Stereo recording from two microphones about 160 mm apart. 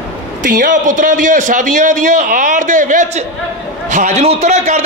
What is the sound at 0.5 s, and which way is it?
A man's voice, 55° right (ahead or behind).